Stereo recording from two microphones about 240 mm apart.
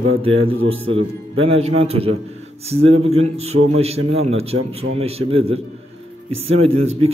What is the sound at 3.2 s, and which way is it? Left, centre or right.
Speech, right.